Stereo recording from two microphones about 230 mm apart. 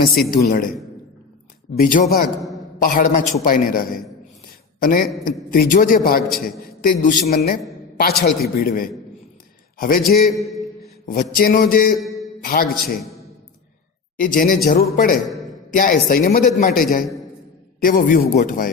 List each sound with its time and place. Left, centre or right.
0.0 s a man's voice: left
1.8 s a man's voice: left
14.2 s a man's voice: left
15.3 s a sound: centre
15.7 s a man's voice: left